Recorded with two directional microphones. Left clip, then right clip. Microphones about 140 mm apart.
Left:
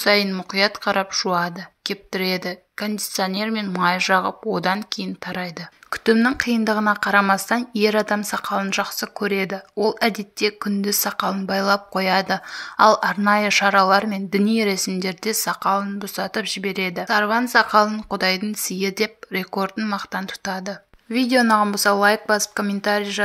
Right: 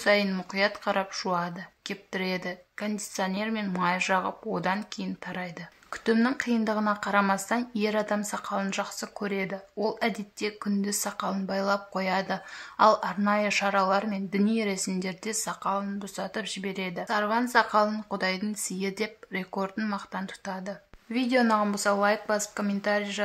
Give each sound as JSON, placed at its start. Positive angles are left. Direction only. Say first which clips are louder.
{"t": 0.0, "sound": "speech", "louder": "left 6 dB", "side_deg": 35}